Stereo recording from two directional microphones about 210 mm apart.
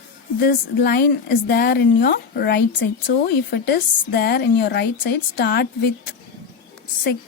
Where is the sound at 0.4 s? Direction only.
50° left (ahead or behind).